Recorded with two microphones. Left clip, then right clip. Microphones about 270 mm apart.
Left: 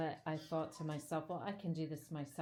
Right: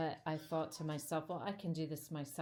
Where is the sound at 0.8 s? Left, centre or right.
Right.